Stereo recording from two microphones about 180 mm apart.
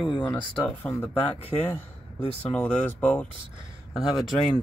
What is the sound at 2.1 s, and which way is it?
Speech, 5° left (ahead or behind).